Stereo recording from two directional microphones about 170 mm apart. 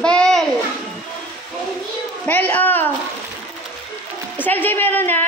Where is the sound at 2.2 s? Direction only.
10° left (ahead or behind).